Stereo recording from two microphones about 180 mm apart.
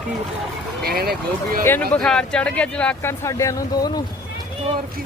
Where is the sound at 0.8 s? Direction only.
60° right (ahead or behind).